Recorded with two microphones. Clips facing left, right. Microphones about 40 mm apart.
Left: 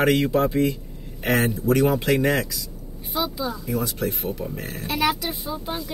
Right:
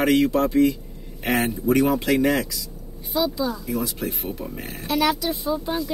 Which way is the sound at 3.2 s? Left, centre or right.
Centre.